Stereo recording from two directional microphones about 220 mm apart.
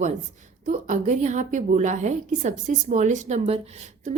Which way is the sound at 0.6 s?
35° right (ahead or behind).